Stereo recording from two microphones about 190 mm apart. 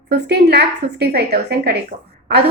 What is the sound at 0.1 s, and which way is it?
A woman's voice, 55° right (ahead or behind).